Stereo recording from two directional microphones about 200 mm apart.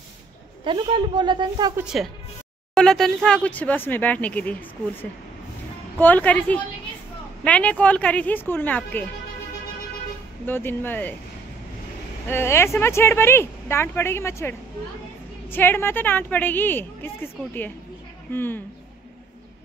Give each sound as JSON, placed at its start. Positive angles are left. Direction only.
{"t": 0.7, "sound": "a woman's voice", "side_deg": -25}
{"t": 1.8, "sound": "a woman's voice", "side_deg": -5}
{"t": 5.9, "sound": "a woman's voice", "side_deg": 10}
{"t": 10.4, "sound": "a woman's voice", "side_deg": 10}
{"t": 12.3, "sound": "a woman's voice", "side_deg": 10}
{"t": 15.5, "sound": "a woman's voice", "side_deg": 10}